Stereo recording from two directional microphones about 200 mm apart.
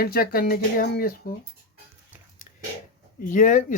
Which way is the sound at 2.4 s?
40° left (ahead or behind).